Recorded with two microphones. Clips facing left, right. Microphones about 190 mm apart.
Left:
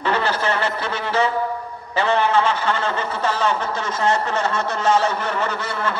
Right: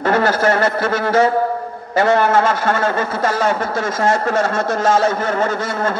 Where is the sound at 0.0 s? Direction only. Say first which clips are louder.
Right 6 dB; 45° right (ahead or behind).